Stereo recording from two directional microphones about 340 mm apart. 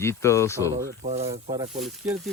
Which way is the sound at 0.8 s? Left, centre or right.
Centre.